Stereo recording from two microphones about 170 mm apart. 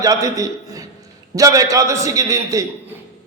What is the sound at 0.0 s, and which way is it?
A man's voice, 20° right (ahead or behind).